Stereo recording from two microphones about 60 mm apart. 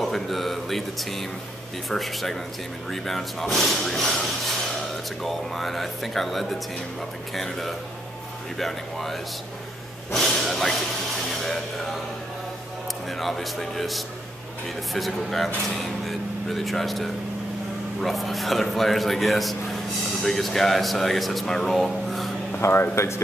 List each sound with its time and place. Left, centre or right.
0.0 s speech: centre
13.2 s speech: centre
22.7 s speech: left